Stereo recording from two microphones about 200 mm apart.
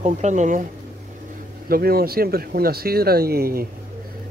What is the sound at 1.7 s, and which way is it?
Speech, 50° right (ahead or behind).